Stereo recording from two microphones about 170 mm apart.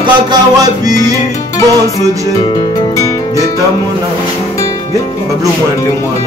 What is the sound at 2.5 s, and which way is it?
Music, 20° left (ahead or behind).